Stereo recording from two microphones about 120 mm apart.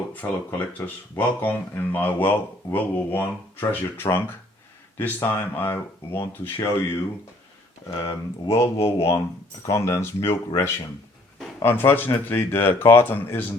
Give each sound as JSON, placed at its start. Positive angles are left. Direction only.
{"t": 0.1, "sound": "speech", "side_deg": 15}
{"t": 7.9, "sound": "speech", "side_deg": 25}